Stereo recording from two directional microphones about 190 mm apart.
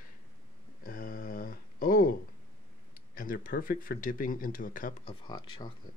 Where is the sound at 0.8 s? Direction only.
50° left (ahead or behind).